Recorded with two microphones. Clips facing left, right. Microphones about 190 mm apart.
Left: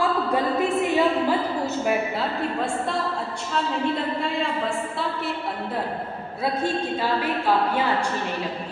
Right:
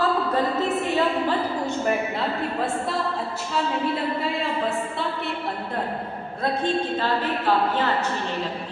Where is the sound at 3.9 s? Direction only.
Centre (ahead or behind).